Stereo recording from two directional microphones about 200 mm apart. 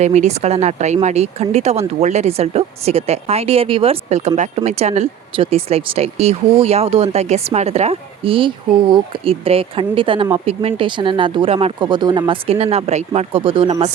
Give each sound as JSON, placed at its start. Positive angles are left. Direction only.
{"t": 0.0, "sound": "speech", "side_deg": -35}